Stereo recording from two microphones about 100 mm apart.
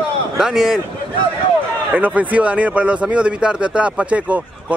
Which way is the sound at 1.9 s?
15° right (ahead or behind).